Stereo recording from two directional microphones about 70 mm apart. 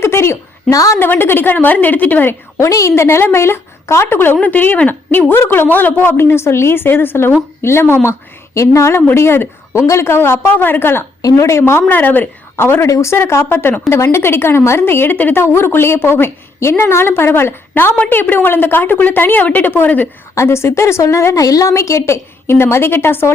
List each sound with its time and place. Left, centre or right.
0.0 s a sound: left
0.7 s a woman's voice: left
0.9 s a woman's voice: left
2.6 s a woman's voice: left
4.0 s a woman's voice: left
11.2 s a woman's voice: left
20.3 s a woman's voice: left
21.4 s a woman's voice: left